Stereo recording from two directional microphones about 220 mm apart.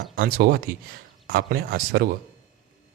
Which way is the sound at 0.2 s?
40° right (ahead or behind).